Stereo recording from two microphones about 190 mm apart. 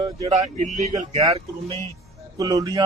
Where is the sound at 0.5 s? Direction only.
35° right (ahead or behind).